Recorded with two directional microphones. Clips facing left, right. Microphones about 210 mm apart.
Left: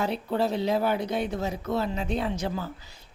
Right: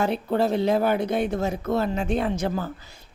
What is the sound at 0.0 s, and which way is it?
Speech, 50° right (ahead or behind).